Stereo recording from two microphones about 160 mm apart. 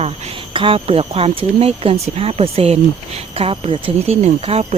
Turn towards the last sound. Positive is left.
turn(degrees=-40)  # may be behind; listen again after turning